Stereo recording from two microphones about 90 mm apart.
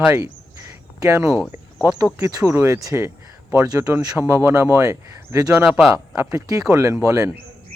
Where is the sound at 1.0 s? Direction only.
45° right (ahead or behind).